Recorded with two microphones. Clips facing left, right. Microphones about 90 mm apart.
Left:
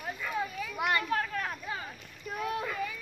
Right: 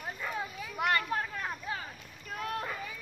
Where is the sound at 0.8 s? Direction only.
20° left (ahead or behind).